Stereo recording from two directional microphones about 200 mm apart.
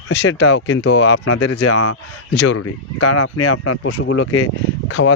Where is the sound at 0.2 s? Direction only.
65° left (ahead or behind); by 1.6 s 80° left.